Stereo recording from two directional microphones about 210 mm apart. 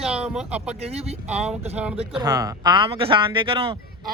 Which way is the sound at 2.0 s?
20° right (ahead or behind).